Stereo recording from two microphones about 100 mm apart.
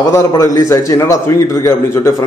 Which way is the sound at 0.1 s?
35° left (ahead or behind).